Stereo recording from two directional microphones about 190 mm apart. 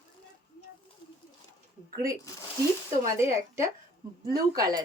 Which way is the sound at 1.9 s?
15° right (ahead or behind).